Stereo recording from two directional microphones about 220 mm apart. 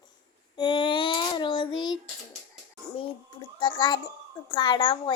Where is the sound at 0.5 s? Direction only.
20° left (ahead or behind).